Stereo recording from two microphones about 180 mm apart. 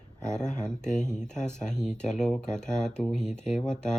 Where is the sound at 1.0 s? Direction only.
5° left (ahead or behind).